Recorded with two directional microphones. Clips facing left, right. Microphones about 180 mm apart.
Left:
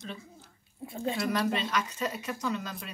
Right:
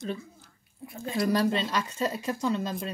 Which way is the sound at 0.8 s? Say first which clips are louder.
Left 2 dB; 25° left (ahead or behind).